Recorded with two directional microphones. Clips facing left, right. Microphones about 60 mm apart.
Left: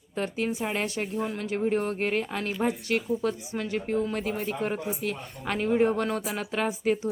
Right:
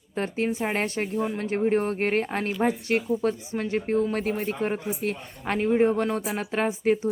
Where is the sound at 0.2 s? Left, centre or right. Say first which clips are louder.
Right 2 dB; right.